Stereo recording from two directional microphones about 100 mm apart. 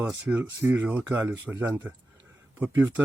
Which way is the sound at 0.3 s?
20° right (ahead or behind).